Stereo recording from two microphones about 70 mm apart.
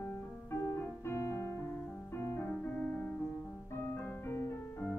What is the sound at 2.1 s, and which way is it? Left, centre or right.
Music, left.